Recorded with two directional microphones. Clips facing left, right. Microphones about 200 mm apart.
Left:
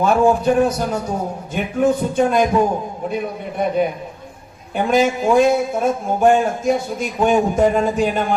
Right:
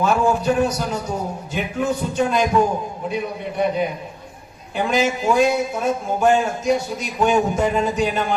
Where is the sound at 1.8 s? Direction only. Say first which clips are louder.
Left 5 dB; 55° left (ahead or behind).